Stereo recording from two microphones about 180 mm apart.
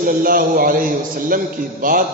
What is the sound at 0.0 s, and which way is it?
A man's voice, 50° right (ahead or behind).